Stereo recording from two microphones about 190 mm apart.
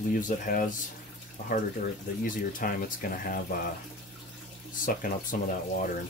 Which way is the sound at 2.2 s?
50° left (ahead or behind).